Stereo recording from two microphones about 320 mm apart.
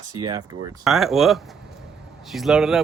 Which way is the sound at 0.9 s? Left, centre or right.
Centre.